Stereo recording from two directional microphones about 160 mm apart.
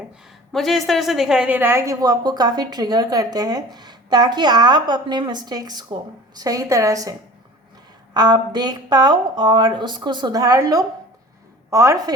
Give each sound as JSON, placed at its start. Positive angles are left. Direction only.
{"t": 0.5, "sound": "a woman's voice", "side_deg": 0}